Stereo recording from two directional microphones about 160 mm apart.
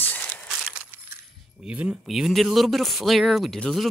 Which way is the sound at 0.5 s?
10° right (ahead or behind).